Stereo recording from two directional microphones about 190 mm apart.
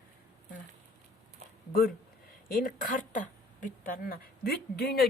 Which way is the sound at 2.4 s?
45° left (ahead or behind).